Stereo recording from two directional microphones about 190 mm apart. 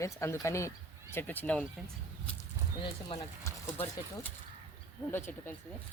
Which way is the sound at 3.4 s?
10° left (ahead or behind).